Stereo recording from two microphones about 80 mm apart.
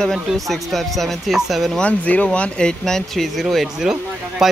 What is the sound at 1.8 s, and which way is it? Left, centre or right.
Speech, centre.